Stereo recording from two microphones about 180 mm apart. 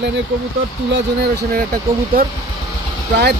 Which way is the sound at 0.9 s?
60° right (ahead or behind).